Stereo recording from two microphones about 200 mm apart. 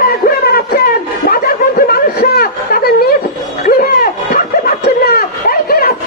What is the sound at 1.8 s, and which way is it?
Snicker, 50° left (ahead or behind).